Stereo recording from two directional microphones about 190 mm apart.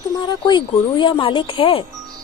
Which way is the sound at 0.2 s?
25° left (ahead or behind).